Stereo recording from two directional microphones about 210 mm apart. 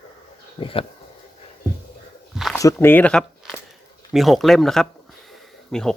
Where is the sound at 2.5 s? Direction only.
15° left (ahead or behind).